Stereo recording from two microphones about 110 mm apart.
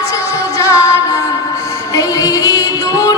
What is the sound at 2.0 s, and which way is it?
Music, 35° left (ahead or behind).